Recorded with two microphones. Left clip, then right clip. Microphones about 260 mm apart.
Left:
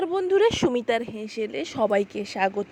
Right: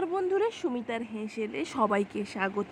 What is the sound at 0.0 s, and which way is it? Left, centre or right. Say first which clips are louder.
A woman's voice: left 7 dB; centre.